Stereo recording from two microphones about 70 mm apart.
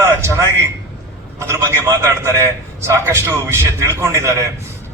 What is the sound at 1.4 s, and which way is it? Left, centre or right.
A man's voice, right.